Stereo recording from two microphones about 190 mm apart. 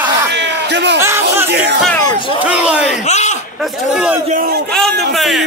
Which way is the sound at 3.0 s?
35° left (ahead or behind).